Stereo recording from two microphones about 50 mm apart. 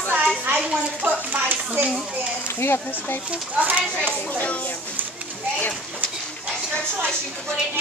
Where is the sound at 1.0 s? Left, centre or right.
Right.